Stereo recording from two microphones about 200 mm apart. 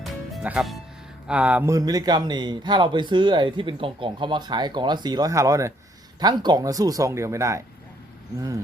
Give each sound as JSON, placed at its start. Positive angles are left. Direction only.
{"t": 0.0, "sound": "music", "side_deg": -5}
{"t": 1.3, "sound": "speech", "side_deg": -5}